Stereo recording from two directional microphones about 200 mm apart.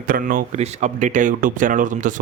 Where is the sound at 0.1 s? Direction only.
45° right (ahead or behind).